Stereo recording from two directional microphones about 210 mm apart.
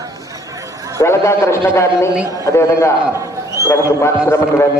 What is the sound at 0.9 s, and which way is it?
A man's voice, 15° left (ahead or behind).